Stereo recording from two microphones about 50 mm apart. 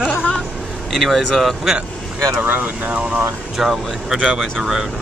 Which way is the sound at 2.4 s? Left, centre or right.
Right.